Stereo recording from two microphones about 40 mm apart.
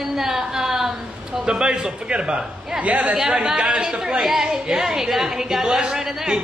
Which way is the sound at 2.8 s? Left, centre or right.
Right.